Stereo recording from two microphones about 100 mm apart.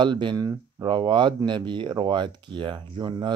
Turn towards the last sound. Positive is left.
turn(degrees=-50)  # may be behind; listen again after turning